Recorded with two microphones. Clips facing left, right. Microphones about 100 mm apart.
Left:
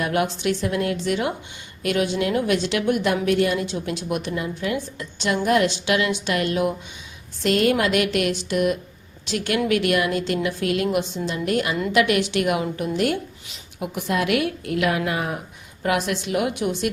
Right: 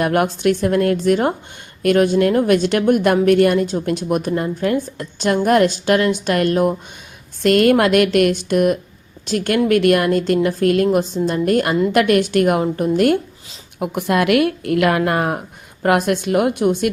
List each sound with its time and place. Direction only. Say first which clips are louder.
0.0 s a woman's voice: right 6 dB; 50° right (ahead or behind)
7.4 s a woman's voice: right 6 dB; 55° right (ahead or behind)